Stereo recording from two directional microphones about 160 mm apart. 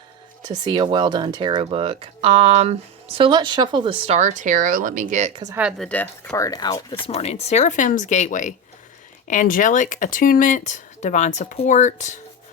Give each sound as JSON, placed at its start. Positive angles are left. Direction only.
{"t": 0.4, "sound": "speech", "side_deg": -25}
{"t": 5.5, "sound": "speech", "side_deg": -5}
{"t": 7.1, "sound": "speech", "side_deg": 40}